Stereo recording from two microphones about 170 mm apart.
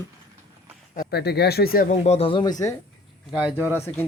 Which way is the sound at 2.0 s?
35° left (ahead or behind).